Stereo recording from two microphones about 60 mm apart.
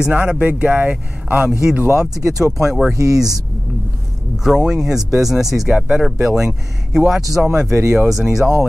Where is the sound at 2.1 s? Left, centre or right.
Right.